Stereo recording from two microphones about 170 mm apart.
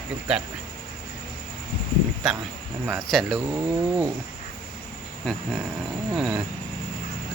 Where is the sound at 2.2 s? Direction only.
Centre (ahead or behind).